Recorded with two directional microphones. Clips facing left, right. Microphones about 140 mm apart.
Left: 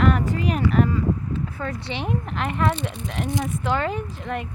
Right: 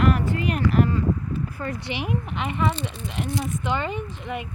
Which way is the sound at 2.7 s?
10° left (ahead or behind).